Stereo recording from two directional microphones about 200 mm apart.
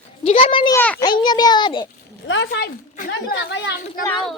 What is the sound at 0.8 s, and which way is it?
Speech, 10° left (ahead or behind).